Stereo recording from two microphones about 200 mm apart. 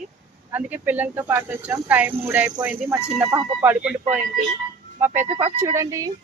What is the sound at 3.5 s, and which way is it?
Speech, 10° right (ahead or behind).